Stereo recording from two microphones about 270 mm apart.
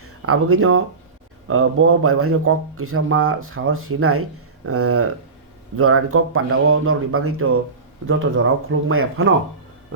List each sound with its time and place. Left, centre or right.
0.2 s speech: right